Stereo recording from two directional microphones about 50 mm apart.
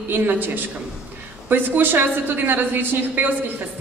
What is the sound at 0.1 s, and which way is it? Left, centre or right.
Speech, right.